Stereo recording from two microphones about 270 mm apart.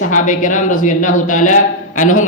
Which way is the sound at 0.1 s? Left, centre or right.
Left.